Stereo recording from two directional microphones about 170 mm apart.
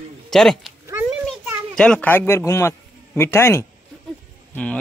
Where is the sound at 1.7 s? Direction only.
5° left (ahead or behind).